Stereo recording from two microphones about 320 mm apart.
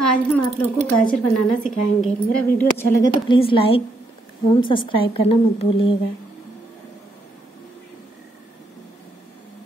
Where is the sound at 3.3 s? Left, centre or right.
Centre.